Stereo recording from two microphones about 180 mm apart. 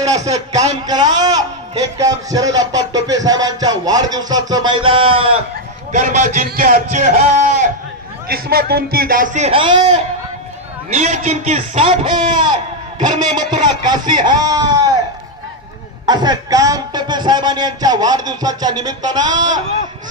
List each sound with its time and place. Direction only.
0.0 s a man's voice: 20° right (ahead or behind)
5.9 s a man's voice: 45° right (ahead or behind)
8.3 s a man's voice: 60° right (ahead or behind); by 12.5 s 30° right (ahead or behind)
13.8 s a man's voice: 25° right (ahead or behind)
16.1 s a man's voice: 20° right (ahead or behind)